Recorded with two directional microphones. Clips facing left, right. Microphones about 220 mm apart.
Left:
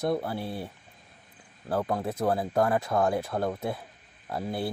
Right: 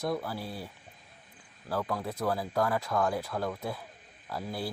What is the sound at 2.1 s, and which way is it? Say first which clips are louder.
Speech: left 4 dB; 25° left (ahead or behind).